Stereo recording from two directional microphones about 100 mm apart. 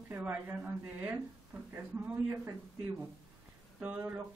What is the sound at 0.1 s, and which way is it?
A woman's voice, 15° right (ahead or behind).